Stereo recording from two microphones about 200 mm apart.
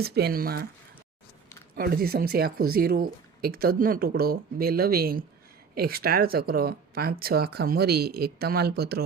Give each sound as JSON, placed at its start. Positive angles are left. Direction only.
{"t": 0.0, "sound": "speech", "side_deg": -50}
{"t": 1.7, "sound": "speech", "side_deg": -50}